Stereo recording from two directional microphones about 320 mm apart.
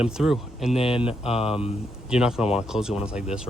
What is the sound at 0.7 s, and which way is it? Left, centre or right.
Mantra, centre.